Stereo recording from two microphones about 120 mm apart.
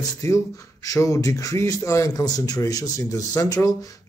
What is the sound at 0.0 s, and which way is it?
Speech, 25° left (ahead or behind).